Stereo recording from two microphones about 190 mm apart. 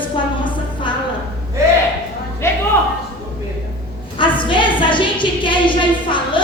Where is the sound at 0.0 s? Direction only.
25° left (ahead or behind).